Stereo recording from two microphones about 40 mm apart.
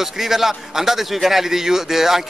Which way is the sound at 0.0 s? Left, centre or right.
Centre.